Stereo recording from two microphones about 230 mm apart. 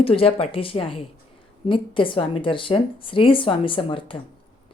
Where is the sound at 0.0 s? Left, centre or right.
Left.